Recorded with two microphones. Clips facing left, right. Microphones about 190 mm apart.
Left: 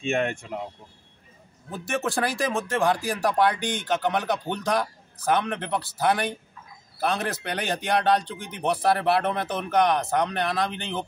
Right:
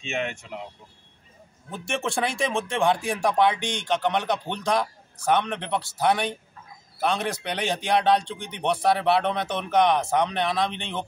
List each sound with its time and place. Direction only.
0.0 s speech: 50° left (ahead or behind)
1.7 s speech: centre (ahead or behind)